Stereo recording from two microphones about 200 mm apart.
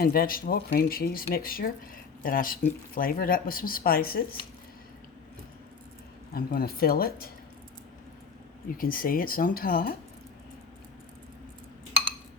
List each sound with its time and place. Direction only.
0.0 s speech: 50° left (ahead or behind)
6.3 s speech: 50° left (ahead or behind)
8.8 s speech: 45° left (ahead or behind)